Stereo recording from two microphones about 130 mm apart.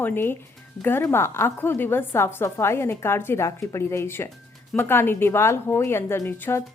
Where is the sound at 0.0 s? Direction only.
15° left (ahead or behind).